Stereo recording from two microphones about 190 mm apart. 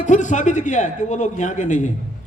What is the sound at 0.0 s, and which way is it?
Speech, 40° left (ahead or behind).